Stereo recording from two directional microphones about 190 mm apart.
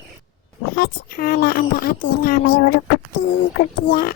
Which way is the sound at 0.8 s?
50° left (ahead or behind).